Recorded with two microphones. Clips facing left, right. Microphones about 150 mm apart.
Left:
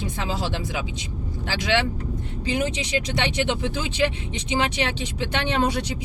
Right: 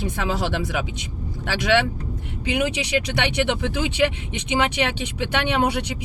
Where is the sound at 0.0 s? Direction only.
65° right (ahead or behind).